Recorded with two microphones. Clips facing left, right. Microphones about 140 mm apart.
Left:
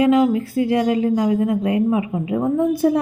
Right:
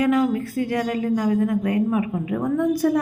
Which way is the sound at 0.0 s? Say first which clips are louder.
Left 4 dB; 20° left (ahead or behind).